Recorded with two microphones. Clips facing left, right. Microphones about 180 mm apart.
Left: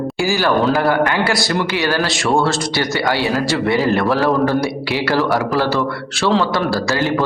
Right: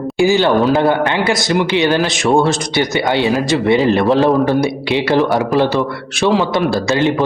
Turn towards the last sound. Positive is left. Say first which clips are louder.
# right 3 dB
turn(degrees=-20)  # may be behind; listen again after turning